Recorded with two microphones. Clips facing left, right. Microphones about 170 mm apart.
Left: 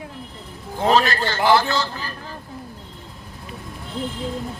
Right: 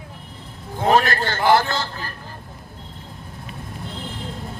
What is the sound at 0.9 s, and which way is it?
A man's voice, 50° right (ahead or behind).